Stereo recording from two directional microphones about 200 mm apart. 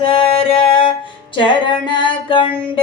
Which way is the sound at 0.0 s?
25° left (ahead or behind).